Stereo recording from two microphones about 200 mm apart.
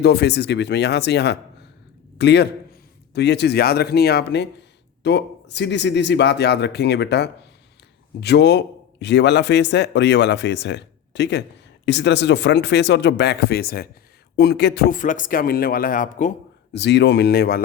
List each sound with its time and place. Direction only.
0.0 s a man's voice: 55° left (ahead or behind)
16.7 s a man's voice: 60° left (ahead or behind)